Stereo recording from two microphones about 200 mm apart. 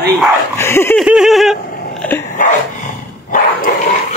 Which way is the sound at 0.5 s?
10° left (ahead or behind).